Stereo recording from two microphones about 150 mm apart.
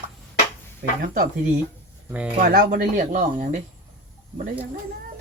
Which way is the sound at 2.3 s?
60° right (ahead or behind).